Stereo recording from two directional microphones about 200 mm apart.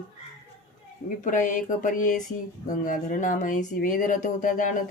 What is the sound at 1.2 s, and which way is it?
Speech, 40° left (ahead or behind).